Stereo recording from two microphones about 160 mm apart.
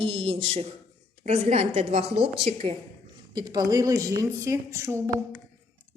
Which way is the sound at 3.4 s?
25° right (ahead or behind).